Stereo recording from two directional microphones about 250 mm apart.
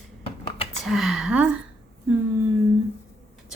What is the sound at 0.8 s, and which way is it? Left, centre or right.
Speech, centre.